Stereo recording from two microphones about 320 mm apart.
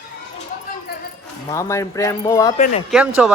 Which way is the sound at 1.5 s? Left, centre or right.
Centre.